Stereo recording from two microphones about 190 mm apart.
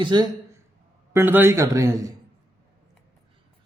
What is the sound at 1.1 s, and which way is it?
A man's voice, 10° right (ahead or behind).